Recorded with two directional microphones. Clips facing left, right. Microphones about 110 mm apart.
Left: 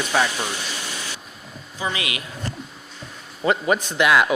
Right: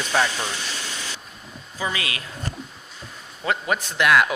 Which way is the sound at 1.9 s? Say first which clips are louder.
Left 1 dB; 20° left (ahead or behind).